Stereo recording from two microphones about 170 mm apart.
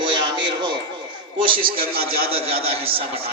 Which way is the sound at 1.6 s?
60° right (ahead or behind).